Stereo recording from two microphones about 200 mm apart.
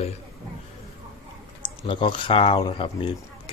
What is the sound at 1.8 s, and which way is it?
Speech, 25° left (ahead or behind).